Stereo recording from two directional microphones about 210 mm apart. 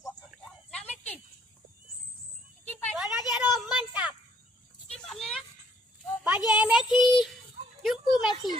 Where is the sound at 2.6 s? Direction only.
10° left (ahead or behind).